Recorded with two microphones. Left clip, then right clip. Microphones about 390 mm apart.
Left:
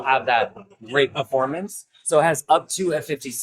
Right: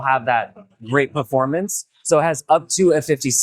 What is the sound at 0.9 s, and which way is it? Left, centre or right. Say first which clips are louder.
Speech: right 2 dB; right.